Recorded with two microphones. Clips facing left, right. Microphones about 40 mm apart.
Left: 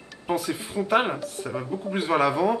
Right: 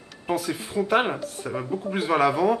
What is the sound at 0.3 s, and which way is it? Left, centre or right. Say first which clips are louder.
Speech: even; centre.